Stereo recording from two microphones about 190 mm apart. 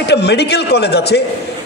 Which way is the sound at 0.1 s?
60° left (ahead or behind).